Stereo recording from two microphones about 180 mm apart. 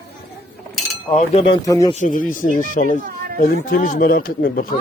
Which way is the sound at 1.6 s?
20° left (ahead or behind).